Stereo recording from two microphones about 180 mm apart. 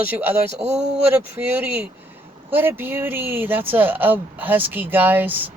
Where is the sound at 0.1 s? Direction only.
10° right (ahead or behind).